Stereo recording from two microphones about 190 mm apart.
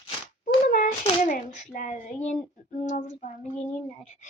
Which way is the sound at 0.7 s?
45° left (ahead or behind).